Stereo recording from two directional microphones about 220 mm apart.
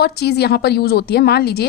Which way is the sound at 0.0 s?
45° left (ahead or behind).